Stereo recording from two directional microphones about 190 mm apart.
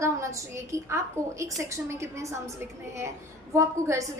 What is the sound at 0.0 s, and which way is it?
A woman's voice, 15° right (ahead or behind).